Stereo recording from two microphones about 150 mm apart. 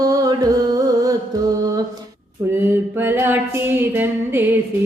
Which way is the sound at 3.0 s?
15° right (ahead or behind).